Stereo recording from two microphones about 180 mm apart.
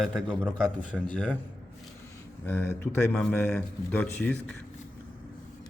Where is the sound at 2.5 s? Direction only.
10° left (ahead or behind).